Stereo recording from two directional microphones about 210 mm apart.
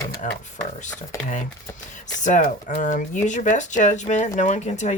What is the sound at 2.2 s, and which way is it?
Speech, 35° left (ahead or behind).